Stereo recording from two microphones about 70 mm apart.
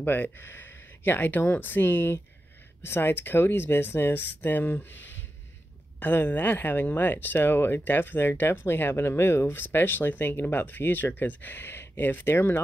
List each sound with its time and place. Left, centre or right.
0.0 s speech: left